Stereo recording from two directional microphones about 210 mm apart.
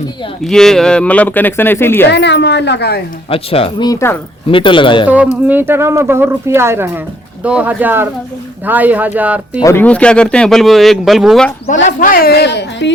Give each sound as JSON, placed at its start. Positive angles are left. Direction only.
{"t": 0.4, "sound": "speech", "side_deg": 0}
{"t": 2.0, "sound": "a woman's voice", "side_deg": 55}
{"t": 3.2, "sound": "speech", "side_deg": 25}
{"t": 4.4, "sound": "speech", "side_deg": 25}
{"t": 5.0, "sound": "speech", "side_deg": -5}
{"t": 9.6, "sound": "speech", "side_deg": 10}
{"t": 11.9, "sound": "a woman's voice", "side_deg": 40}